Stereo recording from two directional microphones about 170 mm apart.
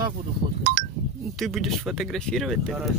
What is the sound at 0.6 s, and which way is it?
Chink, 50° right (ahead or behind).